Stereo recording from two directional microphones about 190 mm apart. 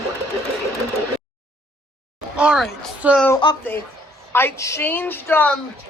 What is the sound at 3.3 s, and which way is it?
A child's voice, 25° left (ahead or behind).